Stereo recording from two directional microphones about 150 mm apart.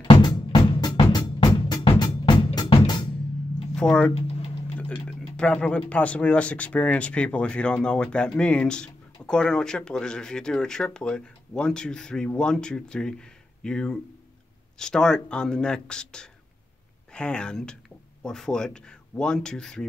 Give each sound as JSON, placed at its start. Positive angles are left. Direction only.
{"t": 0.0, "sound": "music", "side_deg": 30}
{"t": 3.7, "sound": "speech", "side_deg": 5}
{"t": 4.1, "sound": "a sound", "side_deg": 45}
{"t": 5.3, "sound": "speech", "side_deg": 5}